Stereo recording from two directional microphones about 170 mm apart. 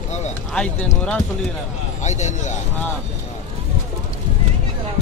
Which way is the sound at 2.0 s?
40° left (ahead or behind).